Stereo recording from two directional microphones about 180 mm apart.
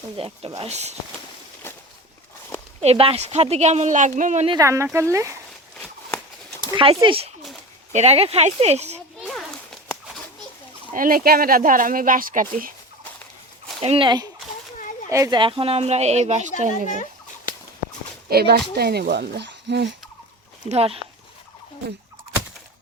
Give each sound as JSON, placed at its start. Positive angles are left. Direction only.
{"t": 0.2, "sound": "speech", "side_deg": -30}
{"t": 1.6, "sound": "a sound", "side_deg": 15}
{"t": 2.8, "sound": "speech", "side_deg": -30}
{"t": 4.4, "sound": "speech", "side_deg": -20}
{"t": 6.7, "sound": "speech", "side_deg": -30}
{"t": 10.9, "sound": "speech", "side_deg": -50}
{"t": 13.8, "sound": "speech", "side_deg": -30}
{"t": 18.3, "sound": "speech", "side_deg": -60}
{"t": 20.7, "sound": "speech", "side_deg": -35}